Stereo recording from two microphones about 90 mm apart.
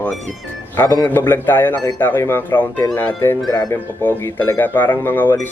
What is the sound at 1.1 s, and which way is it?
Speech, 25° left (ahead or behind).